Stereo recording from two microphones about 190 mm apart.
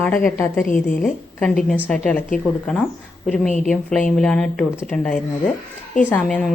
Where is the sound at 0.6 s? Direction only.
45° left (ahead or behind).